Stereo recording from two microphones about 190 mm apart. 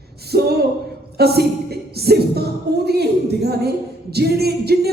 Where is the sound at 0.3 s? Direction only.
60° right (ahead or behind).